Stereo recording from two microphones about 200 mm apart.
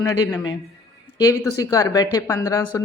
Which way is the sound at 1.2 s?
15° left (ahead or behind).